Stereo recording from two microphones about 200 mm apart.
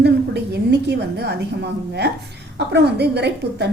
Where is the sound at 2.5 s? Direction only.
55° right (ahead or behind).